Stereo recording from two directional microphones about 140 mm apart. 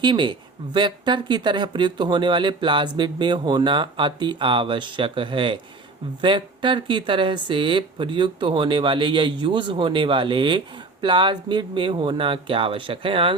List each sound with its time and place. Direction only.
0.0 s speech: 35° right (ahead or behind)